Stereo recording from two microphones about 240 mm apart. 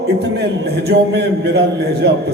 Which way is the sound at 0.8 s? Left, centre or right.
Right.